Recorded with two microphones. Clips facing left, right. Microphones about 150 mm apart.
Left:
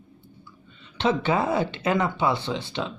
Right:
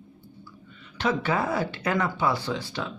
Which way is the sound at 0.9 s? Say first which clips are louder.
Left 3 dB; 25° left (ahead or behind).